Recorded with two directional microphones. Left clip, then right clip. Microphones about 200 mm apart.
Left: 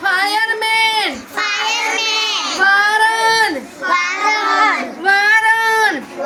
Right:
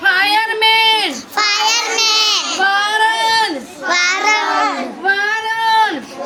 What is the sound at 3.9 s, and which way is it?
Child singing, 50° right (ahead or behind).